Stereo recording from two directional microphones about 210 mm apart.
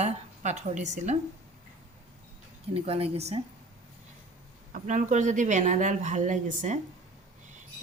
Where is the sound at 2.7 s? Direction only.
30° right (ahead or behind).